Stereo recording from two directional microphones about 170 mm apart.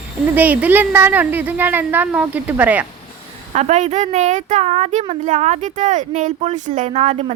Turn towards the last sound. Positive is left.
turn(degrees=-40)  # may be behind; listen again after turning